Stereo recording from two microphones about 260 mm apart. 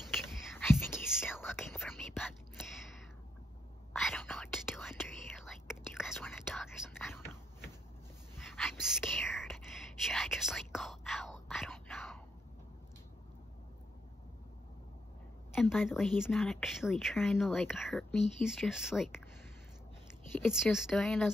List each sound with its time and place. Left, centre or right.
0.1 s whispering: centre
4.0 s whispering: centre
15.5 s speech: centre
20.3 s speech: centre